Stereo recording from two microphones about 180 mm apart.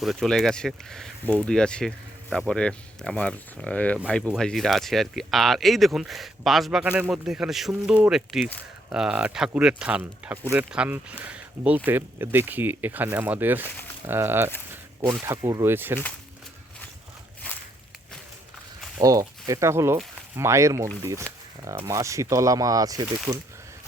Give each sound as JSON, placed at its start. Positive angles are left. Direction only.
{"t": 0.0, "sound": "speech", "side_deg": 0}
{"t": 4.0, "sound": "speech", "side_deg": -5}
{"t": 18.9, "sound": "speech", "side_deg": -20}